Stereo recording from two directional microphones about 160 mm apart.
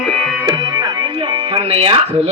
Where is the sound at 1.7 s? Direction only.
35° right (ahead or behind).